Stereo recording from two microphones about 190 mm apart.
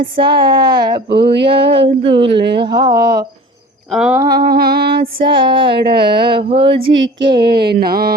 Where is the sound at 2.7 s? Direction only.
20° right (ahead or behind).